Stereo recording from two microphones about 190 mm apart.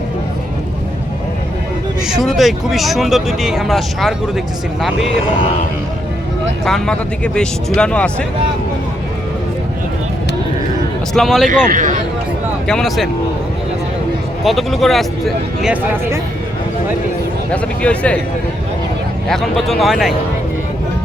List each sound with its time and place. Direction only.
2.0 s speech: centre (ahead or behind)
6.7 s speech: 5° left (ahead or behind)
11.1 s speech: centre (ahead or behind)
11.4 s a man's voice: 40° right (ahead or behind)
12.6 s speech: centre (ahead or behind)
14.4 s speech: centre (ahead or behind)
17.5 s speech: 5° left (ahead or behind)
19.3 s speech: centre (ahead or behind)